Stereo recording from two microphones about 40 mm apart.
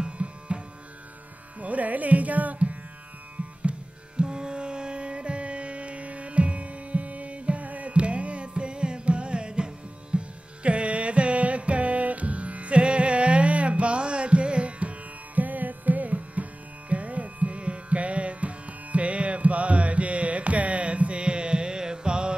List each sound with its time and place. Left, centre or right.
0.0 s music: right
1.6 s music: right
4.2 s music: right